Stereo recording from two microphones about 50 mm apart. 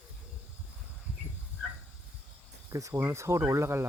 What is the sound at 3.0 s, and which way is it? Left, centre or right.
Speech, right.